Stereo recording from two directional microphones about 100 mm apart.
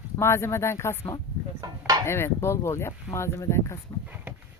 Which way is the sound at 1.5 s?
40° right (ahead or behind).